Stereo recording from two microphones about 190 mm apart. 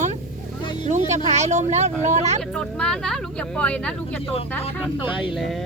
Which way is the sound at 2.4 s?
Centre (ahead or behind).